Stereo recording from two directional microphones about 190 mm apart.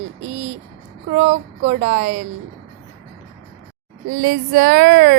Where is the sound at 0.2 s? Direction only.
35° right (ahead or behind).